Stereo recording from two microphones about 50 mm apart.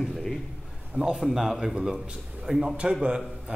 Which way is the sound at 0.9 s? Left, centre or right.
Centre.